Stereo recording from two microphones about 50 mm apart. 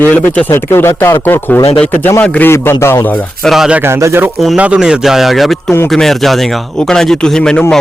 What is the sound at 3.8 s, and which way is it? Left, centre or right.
Speech, right.